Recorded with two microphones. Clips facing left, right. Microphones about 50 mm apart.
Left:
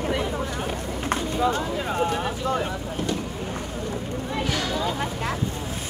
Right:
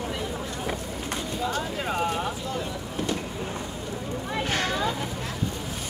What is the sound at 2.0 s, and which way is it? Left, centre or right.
Speech, left.